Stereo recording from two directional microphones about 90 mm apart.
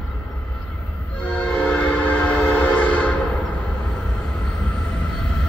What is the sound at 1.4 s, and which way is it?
Train, 15° left (ahead or behind).